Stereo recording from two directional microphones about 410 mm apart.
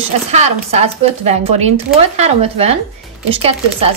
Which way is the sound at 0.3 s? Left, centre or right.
Centre.